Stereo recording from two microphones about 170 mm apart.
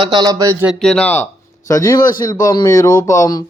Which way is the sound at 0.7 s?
5° left (ahead or behind).